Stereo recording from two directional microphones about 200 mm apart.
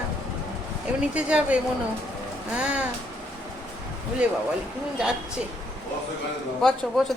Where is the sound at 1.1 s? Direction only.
5° right (ahead or behind).